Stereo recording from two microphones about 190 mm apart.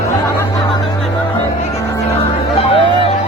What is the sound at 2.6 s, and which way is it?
Music, 25° left (ahead or behind).